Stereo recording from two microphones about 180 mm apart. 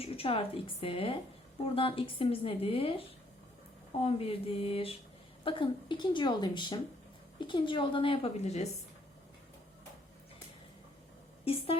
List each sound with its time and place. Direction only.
0.0 s a woman's voice: 30° left (ahead or behind)
4.0 s a woman's voice: 30° left (ahead or behind)
11.4 s a woman's voice: 30° left (ahead or behind)